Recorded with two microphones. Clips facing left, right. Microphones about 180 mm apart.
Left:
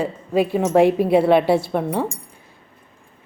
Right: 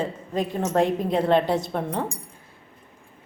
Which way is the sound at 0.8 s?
10° left (ahead or behind).